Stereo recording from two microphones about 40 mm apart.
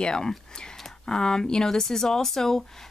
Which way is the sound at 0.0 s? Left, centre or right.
Centre.